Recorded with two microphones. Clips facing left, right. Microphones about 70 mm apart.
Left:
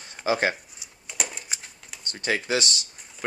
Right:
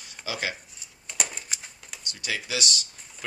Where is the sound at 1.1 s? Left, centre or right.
Centre.